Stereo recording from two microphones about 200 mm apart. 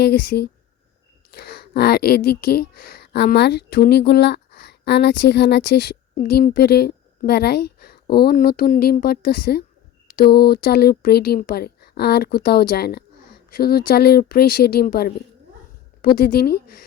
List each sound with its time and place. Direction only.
0.0 s speech: 55° left (ahead or behind)